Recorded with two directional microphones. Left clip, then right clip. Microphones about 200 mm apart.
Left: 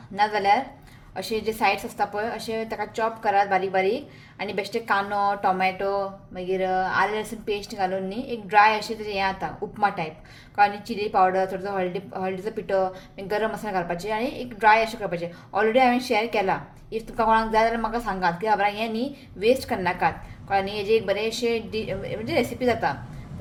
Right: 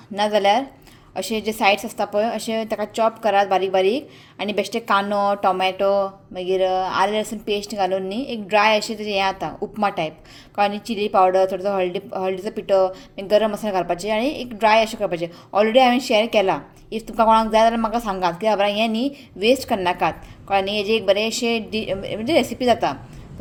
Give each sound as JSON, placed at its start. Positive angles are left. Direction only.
{"t": 0.2, "sound": "a woman's voice", "side_deg": -50}